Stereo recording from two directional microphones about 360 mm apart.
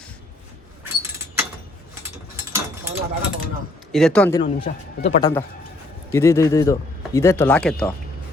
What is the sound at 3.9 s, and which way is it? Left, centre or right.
Speech, centre.